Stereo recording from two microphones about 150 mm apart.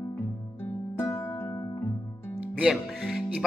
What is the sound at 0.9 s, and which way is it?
Music, 15° left (ahead or behind).